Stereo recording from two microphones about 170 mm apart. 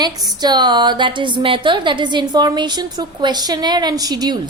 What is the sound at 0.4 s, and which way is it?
A woman's voice, 25° right (ahead or behind).